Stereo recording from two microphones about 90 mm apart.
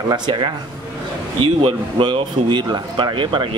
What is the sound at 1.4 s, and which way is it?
Speech, 70° right (ahead or behind).